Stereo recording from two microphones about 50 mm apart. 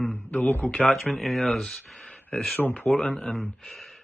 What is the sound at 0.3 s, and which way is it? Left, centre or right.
Speech, left.